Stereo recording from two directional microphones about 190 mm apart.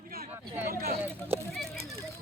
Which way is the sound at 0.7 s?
50° right (ahead or behind).